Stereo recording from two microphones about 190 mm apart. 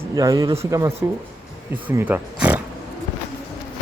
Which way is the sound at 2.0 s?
10° right (ahead or behind).